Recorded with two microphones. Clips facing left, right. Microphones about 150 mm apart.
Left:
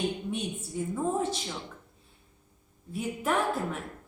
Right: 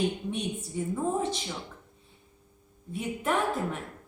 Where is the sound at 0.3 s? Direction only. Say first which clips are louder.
Right 1 dB; centre (ahead or behind).